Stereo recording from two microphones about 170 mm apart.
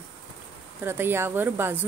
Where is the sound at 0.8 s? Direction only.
15° right (ahead or behind).